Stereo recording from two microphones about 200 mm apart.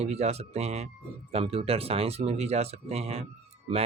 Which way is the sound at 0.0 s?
35° right (ahead or behind).